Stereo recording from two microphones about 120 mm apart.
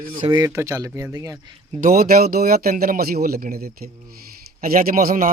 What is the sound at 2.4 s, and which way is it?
Speech, 75° right (ahead or behind).